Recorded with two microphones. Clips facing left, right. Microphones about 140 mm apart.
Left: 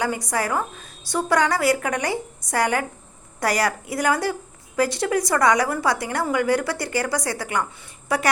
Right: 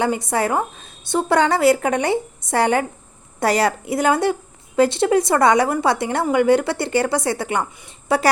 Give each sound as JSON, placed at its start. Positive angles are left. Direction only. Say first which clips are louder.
{"t": 0.0, "sound": "a woman's voice", "louder": "right 4 dB", "side_deg": -25}